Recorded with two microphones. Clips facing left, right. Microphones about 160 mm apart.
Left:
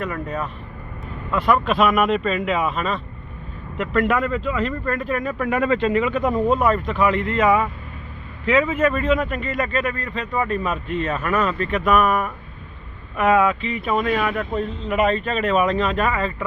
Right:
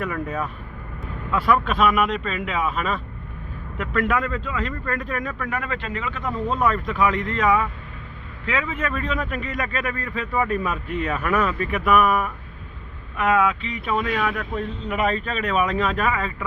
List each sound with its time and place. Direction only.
0.0 s speech: 5° right (ahead or behind)
4.9 s speech: centre (ahead or behind)
5.4 s speech: 20° left (ahead or behind)
6.6 s speech: 5° left (ahead or behind)